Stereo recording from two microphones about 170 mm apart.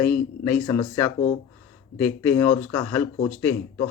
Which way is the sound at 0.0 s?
10° left (ahead or behind).